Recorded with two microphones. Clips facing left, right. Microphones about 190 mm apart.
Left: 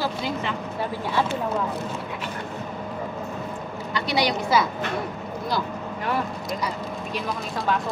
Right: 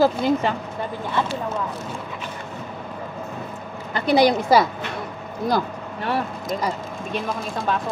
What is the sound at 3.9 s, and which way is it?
Speech, 50° right (ahead or behind).